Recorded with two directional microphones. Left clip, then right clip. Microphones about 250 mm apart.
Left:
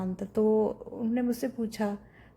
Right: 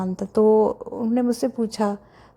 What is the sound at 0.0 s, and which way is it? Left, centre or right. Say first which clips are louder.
A woman's voice: right 9 dB; right.